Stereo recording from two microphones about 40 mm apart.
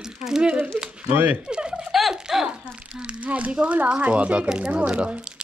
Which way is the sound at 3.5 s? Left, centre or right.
Right.